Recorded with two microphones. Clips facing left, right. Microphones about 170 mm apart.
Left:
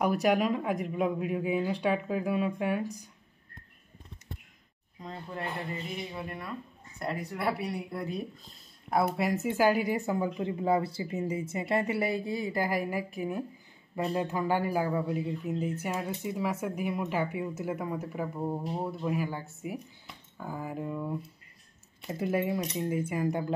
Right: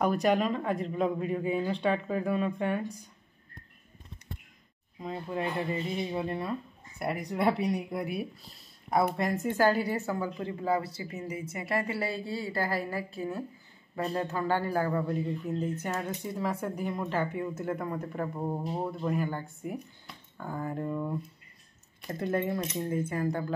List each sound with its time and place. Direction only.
0.0 s speech: 10° left (ahead or behind)
5.0 s speech: 15° right (ahead or behind)
7.0 s speech: 15° right (ahead or behind)
8.9 s speech: 5° left (ahead or behind)